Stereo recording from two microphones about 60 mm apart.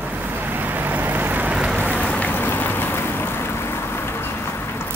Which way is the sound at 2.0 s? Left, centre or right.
Left.